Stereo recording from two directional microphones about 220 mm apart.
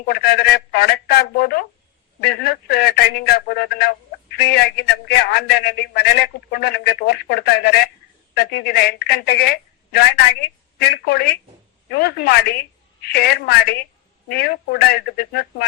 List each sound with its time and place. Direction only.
0.0 s a man's voice: 45° left (ahead or behind)